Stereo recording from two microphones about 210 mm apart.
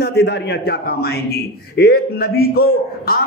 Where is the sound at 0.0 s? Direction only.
50° left (ahead or behind).